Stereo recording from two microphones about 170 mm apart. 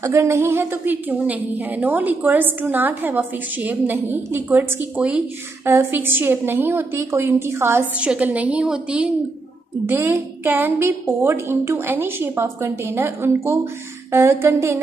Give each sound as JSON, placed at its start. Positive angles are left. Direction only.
{"t": 0.0, "sound": "a woman's voice", "side_deg": -15}